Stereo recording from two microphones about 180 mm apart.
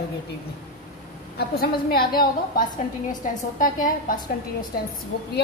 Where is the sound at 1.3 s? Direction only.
55° left (ahead or behind).